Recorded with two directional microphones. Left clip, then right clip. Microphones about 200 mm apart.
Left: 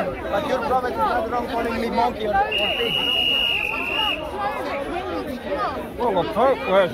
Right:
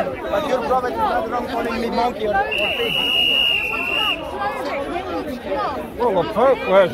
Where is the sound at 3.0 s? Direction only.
35° right (ahead or behind).